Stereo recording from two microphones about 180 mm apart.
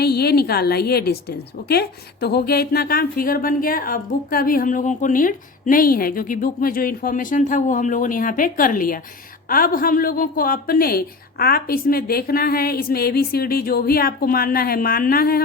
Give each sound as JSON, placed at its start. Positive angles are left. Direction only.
{"t": 0.0, "sound": "a woman's voice", "side_deg": 60}